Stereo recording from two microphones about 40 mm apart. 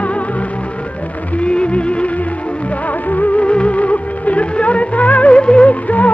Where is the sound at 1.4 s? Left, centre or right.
Left.